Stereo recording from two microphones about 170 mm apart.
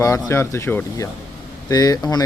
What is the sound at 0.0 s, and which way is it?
Speech, 15° left (ahead or behind).